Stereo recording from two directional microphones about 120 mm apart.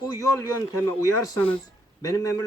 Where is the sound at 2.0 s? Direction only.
30° left (ahead or behind).